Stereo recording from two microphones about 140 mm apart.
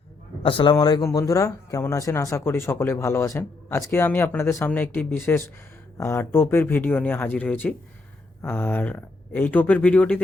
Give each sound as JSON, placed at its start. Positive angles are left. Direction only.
{"t": 0.4, "sound": "speech", "side_deg": 35}